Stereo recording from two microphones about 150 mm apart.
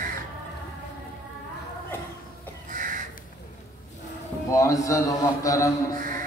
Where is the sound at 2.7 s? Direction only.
60° right (ahead or behind).